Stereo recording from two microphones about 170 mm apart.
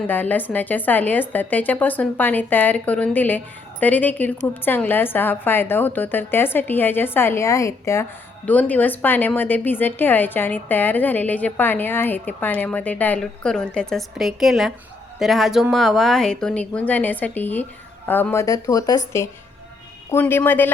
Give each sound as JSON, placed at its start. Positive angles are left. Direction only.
{"t": 0.1, "sound": "a woman's voice", "side_deg": 10}